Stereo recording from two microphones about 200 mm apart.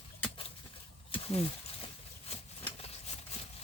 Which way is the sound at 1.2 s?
30° left (ahead or behind).